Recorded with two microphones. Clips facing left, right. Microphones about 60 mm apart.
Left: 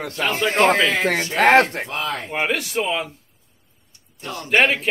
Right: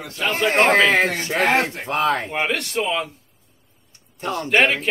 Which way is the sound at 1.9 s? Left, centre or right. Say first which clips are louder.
Right 6 dB; right.